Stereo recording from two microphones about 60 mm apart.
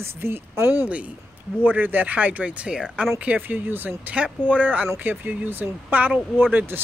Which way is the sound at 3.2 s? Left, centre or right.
Right.